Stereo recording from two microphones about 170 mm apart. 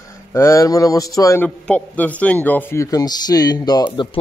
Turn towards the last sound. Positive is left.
turn(degrees=25)  # may be behind; listen again after turning